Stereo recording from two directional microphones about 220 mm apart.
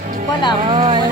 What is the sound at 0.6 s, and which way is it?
Speech, 25° right (ahead or behind).